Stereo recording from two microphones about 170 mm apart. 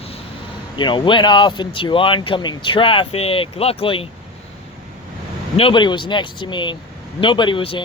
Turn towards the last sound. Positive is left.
turn(degrees=30)  # may be behind; listen again after turning